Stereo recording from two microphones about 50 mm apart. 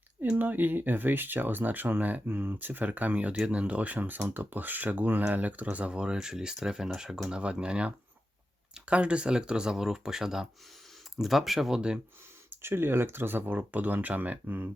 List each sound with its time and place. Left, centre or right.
0.3 s speech: right; by 11.8 s centre
12.5 s speech: right